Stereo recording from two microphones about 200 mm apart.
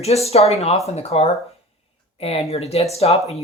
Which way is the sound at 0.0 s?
30° left (ahead or behind).